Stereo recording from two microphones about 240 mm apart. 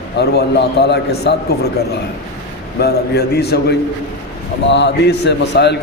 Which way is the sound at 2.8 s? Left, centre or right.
Left.